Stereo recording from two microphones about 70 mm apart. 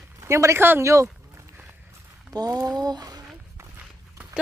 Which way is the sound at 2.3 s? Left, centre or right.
Right.